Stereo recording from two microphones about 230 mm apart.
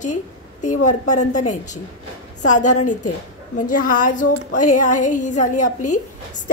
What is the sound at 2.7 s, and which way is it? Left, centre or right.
Speech, left.